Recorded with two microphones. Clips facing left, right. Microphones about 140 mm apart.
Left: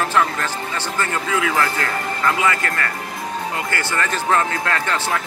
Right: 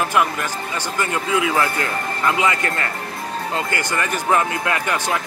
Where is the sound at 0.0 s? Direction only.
15° right (ahead or behind).